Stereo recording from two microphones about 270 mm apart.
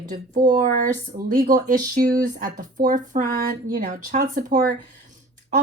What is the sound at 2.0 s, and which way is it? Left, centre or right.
Speech, centre.